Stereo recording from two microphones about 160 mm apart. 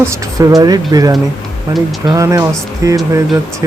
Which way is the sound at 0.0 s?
20° right (ahead or behind).